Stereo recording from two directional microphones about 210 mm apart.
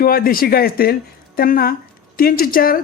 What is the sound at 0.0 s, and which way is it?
Speech, 45° left (ahead or behind).